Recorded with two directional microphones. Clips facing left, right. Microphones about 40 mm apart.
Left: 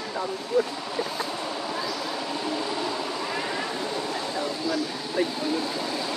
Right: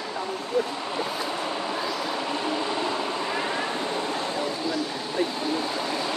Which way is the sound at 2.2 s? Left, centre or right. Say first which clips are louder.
Right 1 dB; right.